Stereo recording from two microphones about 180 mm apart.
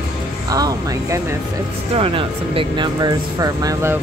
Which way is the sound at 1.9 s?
30° right (ahead or behind).